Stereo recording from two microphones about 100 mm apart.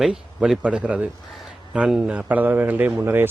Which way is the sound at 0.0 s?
5° right (ahead or behind).